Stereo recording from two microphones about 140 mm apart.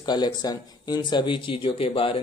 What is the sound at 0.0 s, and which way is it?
Speech, 30° left (ahead or behind).